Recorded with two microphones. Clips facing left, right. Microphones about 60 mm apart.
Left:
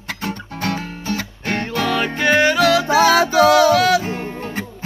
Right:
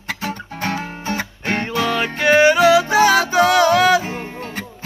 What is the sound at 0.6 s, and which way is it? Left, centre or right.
Music, right.